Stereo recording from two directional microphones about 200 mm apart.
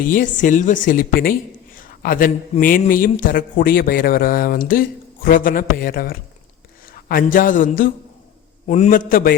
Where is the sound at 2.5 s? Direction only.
45° left (ahead or behind).